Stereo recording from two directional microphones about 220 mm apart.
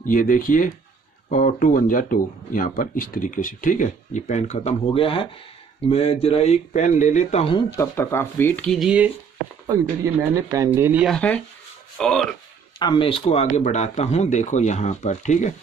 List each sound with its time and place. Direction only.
0.0 s speech: 40° left (ahead or behind)
7.7 s speech: 10° left (ahead or behind); by 11.1 s 5° right (ahead or behind)
11.1 s speech: 5° left (ahead or behind)
12.7 s speech: 20° left (ahead or behind)